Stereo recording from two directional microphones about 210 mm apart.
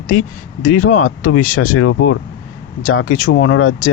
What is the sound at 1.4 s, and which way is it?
Speech, 40° left (ahead or behind).